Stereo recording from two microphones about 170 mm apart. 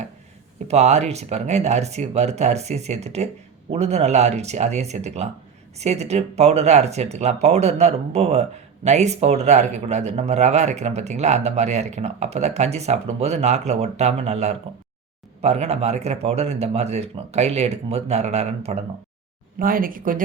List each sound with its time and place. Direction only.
0.7 s speech: 40° right (ahead or behind)
19.5 s speech: 55° right (ahead or behind)